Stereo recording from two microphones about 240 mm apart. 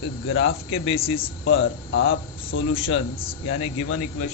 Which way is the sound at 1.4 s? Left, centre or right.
Left.